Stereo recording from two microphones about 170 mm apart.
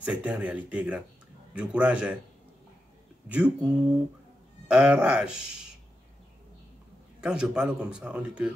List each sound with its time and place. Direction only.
0.0 s speech: 5° right (ahead or behind)
3.3 s speech: 10° right (ahead or behind)
7.2 s speech: 5° right (ahead or behind)